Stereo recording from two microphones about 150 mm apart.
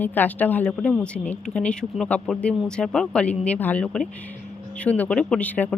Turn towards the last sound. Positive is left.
turn(degrees=10)  # may be behind; listen again after turning